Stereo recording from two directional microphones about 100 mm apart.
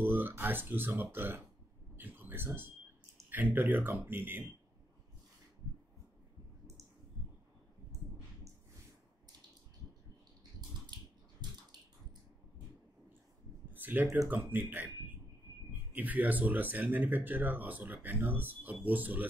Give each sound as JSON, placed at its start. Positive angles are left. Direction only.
{"t": 0.0, "sound": "speech", "side_deg": -20}
{"t": 11.4, "sound": "a sound", "side_deg": -45}
{"t": 13.7, "sound": "speech", "side_deg": -20}
{"t": 15.9, "sound": "speech", "side_deg": -15}